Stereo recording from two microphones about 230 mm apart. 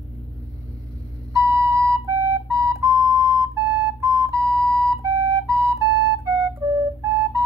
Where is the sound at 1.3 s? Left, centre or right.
Centre.